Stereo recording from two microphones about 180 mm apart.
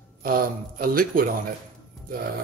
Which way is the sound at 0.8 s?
55° right (ahead or behind).